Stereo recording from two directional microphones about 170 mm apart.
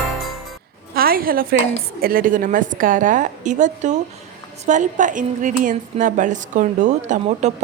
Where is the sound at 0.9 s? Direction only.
60° right (ahead or behind).